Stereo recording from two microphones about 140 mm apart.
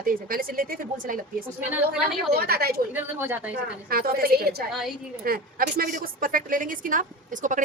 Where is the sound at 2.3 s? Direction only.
90° right.